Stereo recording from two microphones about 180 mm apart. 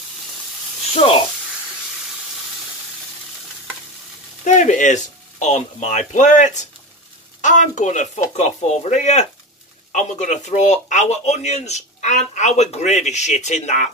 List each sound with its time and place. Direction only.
0.9 s speech: 30° left (ahead or behind)
4.5 s speech: 45° left (ahead or behind)